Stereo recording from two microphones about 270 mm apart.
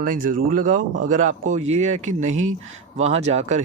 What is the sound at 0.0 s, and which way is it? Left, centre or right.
Speech, right.